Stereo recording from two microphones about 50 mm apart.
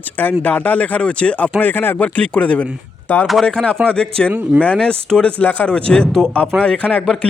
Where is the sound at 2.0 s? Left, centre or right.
Left.